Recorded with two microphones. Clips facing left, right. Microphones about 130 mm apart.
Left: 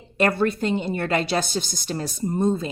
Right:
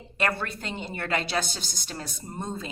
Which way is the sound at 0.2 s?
35° left (ahead or behind).